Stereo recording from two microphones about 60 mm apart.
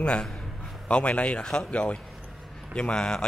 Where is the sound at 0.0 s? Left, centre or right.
Centre.